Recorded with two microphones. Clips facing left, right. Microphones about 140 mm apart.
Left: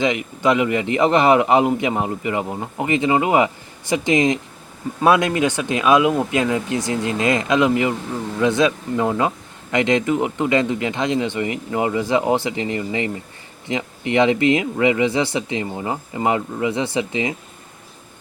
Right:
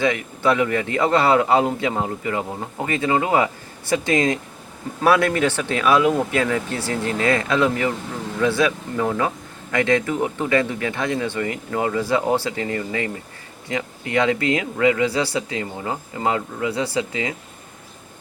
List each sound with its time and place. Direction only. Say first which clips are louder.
0.0 s speech: left 1 dB; 20° left (ahead or behind)